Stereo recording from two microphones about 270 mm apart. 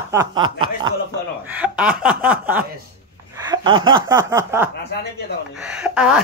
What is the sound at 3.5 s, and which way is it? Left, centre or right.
Snicker, centre.